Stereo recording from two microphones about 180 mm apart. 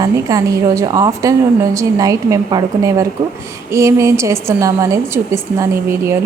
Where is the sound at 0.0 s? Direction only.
20° right (ahead or behind).